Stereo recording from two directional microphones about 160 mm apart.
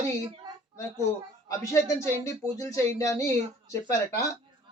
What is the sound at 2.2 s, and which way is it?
A man's voice, 20° left (ahead or behind).